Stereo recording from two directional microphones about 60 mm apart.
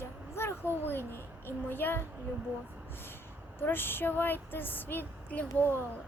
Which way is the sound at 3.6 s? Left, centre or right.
Left.